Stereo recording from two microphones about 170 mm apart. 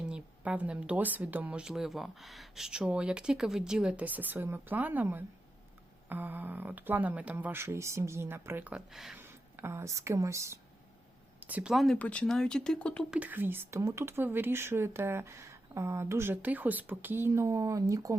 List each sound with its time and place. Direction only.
0.0 s speech: 5° right (ahead or behind)
9.2 s speech: 15° right (ahead or behind); by 13.1 s 5° left (ahead or behind)
13.1 s speech: 10° right (ahead or behind)